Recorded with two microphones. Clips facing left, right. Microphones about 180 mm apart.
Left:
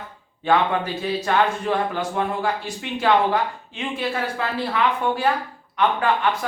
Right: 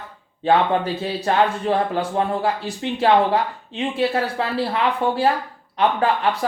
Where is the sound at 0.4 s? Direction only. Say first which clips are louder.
Right 2 dB; 30° right (ahead or behind).